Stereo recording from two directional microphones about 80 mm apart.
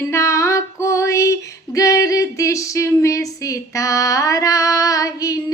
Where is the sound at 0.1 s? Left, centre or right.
Left.